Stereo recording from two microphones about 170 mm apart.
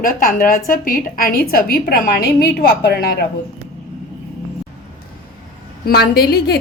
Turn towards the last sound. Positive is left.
turn(degrees=65)  # may be behind; listen again after turning